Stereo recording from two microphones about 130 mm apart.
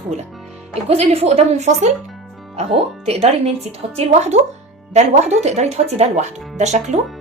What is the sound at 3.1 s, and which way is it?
Speech, 55° right (ahead or behind).